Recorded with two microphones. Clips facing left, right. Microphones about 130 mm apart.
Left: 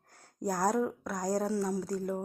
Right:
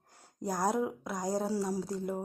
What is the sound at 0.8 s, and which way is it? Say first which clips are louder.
Speech: left 1 dB; 15° right (ahead or behind).